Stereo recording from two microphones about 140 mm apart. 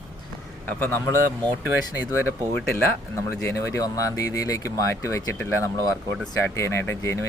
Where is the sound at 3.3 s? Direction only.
15° left (ahead or behind).